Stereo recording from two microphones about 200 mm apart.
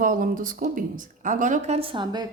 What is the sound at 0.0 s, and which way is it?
Speech, 45° right (ahead or behind).